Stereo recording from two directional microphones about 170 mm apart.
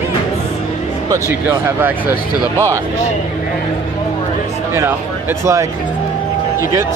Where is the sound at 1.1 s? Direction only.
15° right (ahead or behind).